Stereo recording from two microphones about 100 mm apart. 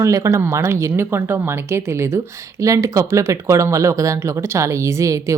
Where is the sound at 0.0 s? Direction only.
30° right (ahead or behind).